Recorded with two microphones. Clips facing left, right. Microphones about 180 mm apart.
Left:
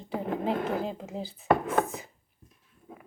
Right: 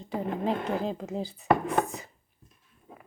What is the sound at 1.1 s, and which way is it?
Speech, 15° right (ahead or behind).